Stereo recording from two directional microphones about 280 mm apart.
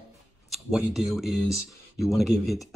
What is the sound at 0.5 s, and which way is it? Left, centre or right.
Speech, centre.